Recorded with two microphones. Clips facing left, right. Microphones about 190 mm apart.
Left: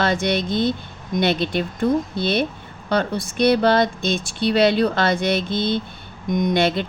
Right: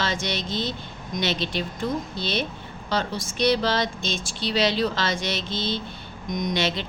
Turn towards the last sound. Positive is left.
turn(degrees=55)  # may be behind; listen again after turning